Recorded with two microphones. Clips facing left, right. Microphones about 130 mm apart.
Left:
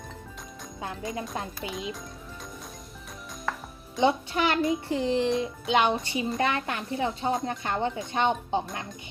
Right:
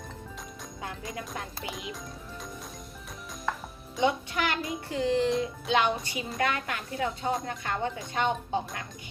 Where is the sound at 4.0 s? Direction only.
25° left (ahead or behind).